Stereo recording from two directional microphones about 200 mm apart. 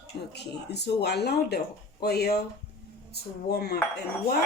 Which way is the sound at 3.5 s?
50° left (ahead or behind).